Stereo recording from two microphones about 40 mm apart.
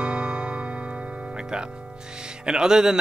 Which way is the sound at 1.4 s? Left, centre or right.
Centre.